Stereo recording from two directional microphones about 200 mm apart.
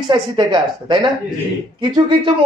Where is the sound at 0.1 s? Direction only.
20° right (ahead or behind).